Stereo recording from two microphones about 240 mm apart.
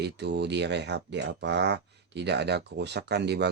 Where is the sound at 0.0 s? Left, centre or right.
Right.